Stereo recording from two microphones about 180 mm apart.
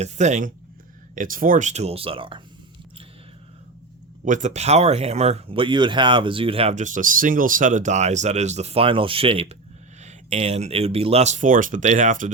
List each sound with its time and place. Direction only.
0.0 s speech: 40° right (ahead or behind)
4.3 s speech: 40° right (ahead or behind)